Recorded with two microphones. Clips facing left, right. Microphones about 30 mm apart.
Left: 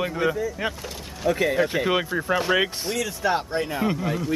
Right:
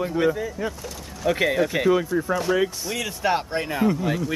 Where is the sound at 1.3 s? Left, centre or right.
Centre.